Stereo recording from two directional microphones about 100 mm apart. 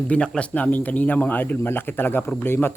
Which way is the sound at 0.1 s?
10° left (ahead or behind).